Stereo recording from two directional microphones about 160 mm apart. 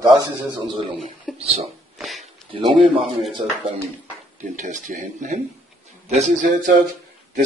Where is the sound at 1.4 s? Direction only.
40° right (ahead or behind).